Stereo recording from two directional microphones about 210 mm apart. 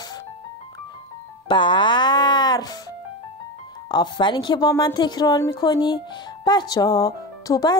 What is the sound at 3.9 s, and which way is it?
A woman's voice, 20° left (ahead or behind).